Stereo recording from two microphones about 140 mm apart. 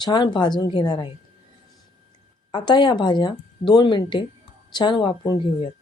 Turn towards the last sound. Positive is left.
turn(degrees=30)  # may be behind; listen again after turning